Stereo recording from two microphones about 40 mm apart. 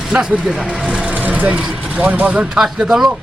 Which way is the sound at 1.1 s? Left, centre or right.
Right.